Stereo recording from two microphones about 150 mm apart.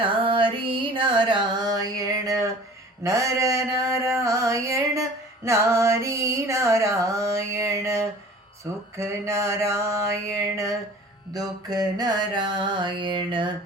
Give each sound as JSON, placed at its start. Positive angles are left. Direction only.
{"t": 0.0, "sound": "a sound", "side_deg": -35}
{"t": 5.5, "sound": "music", "side_deg": -20}
{"t": 11.3, "sound": "music", "side_deg": -25}